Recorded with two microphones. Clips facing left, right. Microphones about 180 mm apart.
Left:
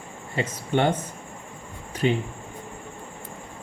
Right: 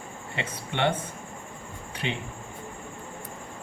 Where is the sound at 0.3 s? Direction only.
40° left (ahead or behind).